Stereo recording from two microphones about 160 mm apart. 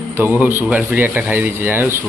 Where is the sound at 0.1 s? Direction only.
15° right (ahead or behind).